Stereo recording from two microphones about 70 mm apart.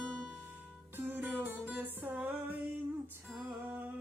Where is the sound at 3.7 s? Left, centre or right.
Right.